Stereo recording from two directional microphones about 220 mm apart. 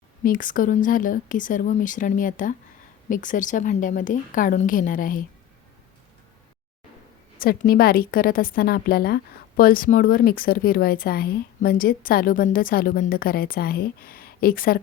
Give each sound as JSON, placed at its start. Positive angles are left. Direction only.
{"t": 0.3, "sound": "a woman's voice", "side_deg": 40}
{"t": 7.3, "sound": "a woman's voice", "side_deg": 40}